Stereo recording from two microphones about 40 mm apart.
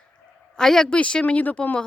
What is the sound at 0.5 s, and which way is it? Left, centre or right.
Speech, centre.